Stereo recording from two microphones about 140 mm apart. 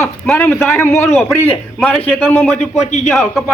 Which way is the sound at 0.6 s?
20° left (ahead or behind).